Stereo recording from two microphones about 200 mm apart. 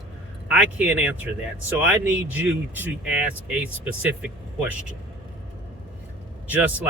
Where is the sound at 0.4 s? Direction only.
5° right (ahead or behind).